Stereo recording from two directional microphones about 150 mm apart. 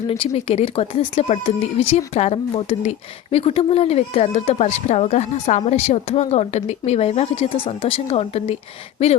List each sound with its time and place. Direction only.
0.1 s speech: 40° left (ahead or behind)